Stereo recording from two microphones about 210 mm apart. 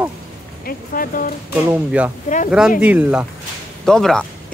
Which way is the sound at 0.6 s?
40° left (ahead or behind).